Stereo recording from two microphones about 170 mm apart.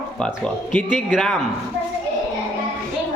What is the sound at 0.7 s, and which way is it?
Speech, 5° left (ahead or behind).